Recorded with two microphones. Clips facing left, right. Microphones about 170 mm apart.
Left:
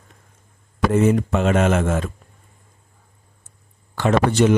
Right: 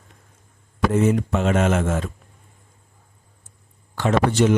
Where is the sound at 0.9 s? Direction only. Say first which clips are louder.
Left 2 dB; 60° left (ahead or behind).